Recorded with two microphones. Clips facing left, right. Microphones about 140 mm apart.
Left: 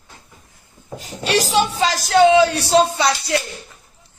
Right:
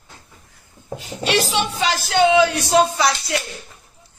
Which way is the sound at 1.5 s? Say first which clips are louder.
Left 3 dB; 40° left (ahead or behind).